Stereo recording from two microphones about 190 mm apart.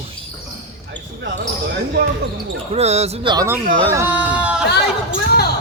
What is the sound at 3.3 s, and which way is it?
Speech, 20° right (ahead or behind).